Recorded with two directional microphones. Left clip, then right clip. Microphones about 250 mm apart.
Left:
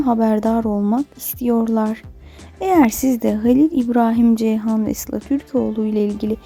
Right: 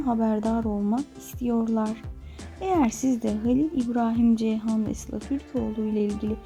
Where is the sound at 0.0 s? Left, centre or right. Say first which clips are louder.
Left 9 dB; left.